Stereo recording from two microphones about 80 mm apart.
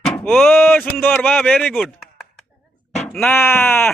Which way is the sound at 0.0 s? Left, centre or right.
Centre.